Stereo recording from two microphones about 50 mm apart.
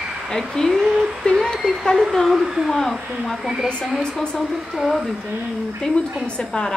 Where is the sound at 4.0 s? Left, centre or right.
Centre.